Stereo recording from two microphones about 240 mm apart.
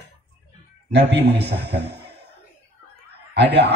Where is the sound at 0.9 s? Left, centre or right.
Right.